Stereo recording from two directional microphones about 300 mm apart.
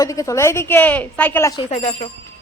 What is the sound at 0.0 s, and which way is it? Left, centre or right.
A woman's voice, centre.